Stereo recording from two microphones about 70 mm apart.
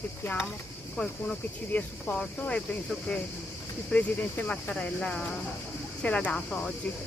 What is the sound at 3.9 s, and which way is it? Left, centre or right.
Speech, centre.